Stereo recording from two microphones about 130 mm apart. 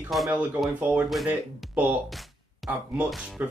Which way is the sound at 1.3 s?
10° right (ahead or behind).